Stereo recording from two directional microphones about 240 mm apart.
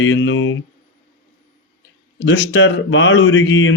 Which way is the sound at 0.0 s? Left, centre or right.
Left.